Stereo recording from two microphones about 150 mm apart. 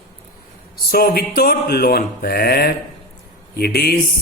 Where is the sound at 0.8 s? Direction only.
90° left.